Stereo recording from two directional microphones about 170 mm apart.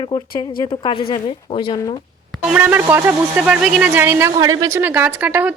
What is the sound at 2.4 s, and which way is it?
Speech, 10° right (ahead or behind).